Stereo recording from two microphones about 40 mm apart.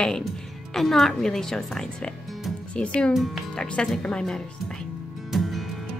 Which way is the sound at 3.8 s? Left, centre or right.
Left.